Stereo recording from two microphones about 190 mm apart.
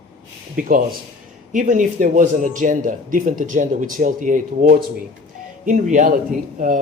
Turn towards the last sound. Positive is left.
turn(degrees=-40)  # may be behind; listen again after turning